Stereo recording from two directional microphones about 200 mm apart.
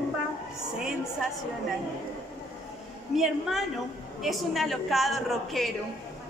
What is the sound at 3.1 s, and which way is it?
A woman's voice, centre (ahead or behind).